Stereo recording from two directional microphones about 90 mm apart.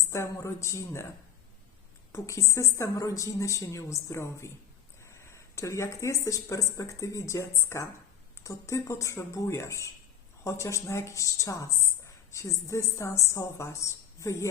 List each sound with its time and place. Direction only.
0.1 s a woman's voice: 35° left (ahead or behind)
2.1 s a woman's voice: 35° left (ahead or behind)